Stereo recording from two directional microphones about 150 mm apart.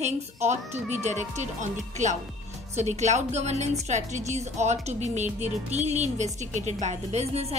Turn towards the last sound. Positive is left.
turn(degrees=-45)  # may be behind; listen again after turning